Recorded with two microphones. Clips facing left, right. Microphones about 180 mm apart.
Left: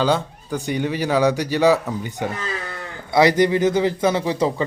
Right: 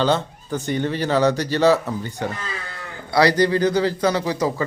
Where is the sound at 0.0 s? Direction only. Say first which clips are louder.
Even; 10° left (ahead or behind).